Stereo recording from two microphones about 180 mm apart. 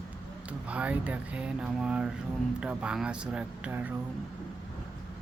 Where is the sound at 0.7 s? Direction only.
5° right (ahead or behind).